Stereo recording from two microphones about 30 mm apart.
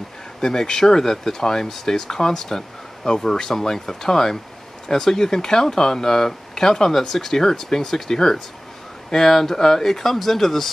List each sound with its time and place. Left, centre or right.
0.4 s speech: centre